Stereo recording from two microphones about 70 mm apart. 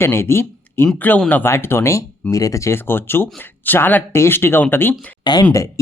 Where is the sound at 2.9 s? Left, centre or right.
Left.